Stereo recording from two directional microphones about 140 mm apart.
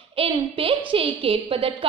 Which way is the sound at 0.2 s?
40° right (ahead or behind).